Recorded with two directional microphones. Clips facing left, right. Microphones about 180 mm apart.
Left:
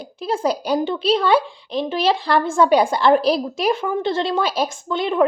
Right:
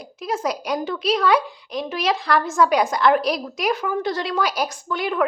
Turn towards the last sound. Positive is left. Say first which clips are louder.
# left 4 dB
turn(degrees=25)  # may be behind; listen again after turning